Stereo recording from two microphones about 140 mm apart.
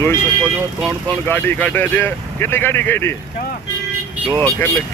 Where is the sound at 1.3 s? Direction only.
15° left (ahead or behind).